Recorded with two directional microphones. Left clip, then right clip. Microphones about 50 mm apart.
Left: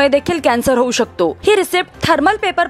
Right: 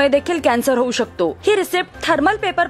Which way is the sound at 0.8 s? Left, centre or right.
Left.